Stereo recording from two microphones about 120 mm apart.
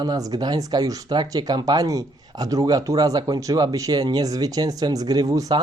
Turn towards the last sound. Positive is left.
turn(degrees=-30)  # may be behind; listen again after turning